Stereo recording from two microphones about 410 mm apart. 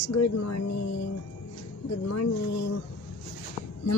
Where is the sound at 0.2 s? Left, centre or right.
Left.